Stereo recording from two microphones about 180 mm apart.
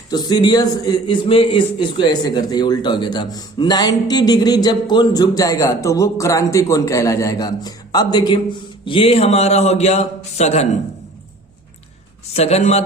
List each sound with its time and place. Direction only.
0.1 s a man's voice: 20° left (ahead or behind); by 10.7 s 40° left (ahead or behind)
12.3 s a man's voice: 35° left (ahead or behind)